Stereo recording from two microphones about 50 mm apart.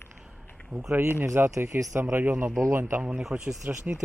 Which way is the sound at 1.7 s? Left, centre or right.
Right.